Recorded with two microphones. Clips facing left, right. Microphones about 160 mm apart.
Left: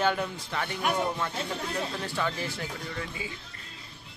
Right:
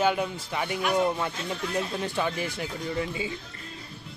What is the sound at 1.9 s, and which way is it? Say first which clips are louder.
Speech: right 3 dB; 20° right (ahead or behind).